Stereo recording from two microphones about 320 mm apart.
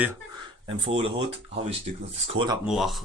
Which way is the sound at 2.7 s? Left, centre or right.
Centre.